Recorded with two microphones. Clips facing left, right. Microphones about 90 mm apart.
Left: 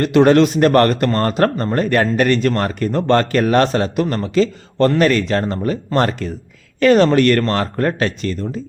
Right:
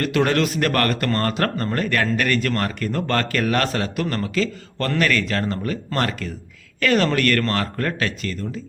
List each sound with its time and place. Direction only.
0.0 s a man's voice: 25° left (ahead or behind)